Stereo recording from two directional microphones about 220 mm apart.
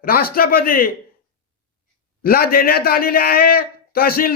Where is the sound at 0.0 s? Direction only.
40° left (ahead or behind).